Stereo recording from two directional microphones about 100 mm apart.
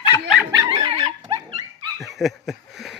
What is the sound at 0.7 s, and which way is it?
Dog, 60° right (ahead or behind).